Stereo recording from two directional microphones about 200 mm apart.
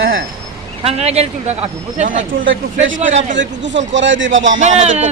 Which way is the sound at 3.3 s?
65° right (ahead or behind).